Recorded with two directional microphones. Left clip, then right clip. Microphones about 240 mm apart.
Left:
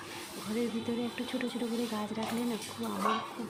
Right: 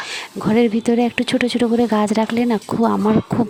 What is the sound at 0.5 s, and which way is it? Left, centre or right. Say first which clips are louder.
Speech: right 18 dB; right.